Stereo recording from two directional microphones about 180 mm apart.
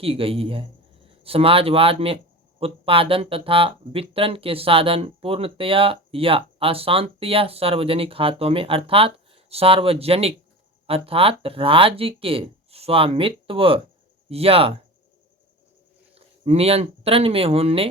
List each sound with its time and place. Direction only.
0.0 s speech: 30° right (ahead or behind)
16.1 s speech: 35° right (ahead or behind)